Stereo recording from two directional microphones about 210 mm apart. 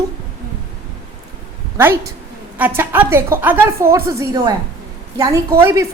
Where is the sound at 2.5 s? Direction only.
10° right (ahead or behind).